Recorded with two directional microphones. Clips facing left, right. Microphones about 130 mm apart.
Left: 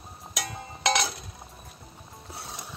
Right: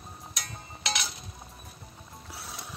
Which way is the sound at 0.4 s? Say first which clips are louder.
Left 10 dB; 90° left.